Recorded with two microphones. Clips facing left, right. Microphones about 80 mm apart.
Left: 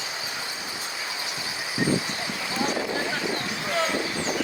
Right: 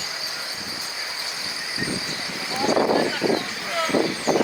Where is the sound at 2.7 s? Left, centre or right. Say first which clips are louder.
Right 9 dB; right.